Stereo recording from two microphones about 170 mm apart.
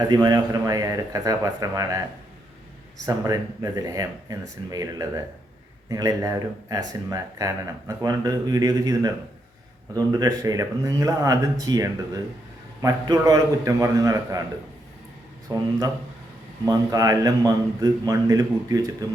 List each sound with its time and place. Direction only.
0.1 s speech: 25° right (ahead or behind)
3.1 s speech: 20° right (ahead or behind)
15.5 s speech: 25° right (ahead or behind)